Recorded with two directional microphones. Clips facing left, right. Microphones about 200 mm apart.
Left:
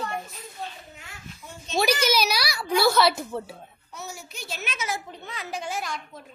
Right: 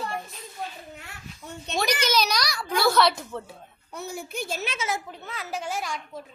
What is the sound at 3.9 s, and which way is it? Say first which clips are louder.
Speech: right 6 dB; 55° right (ahead or behind).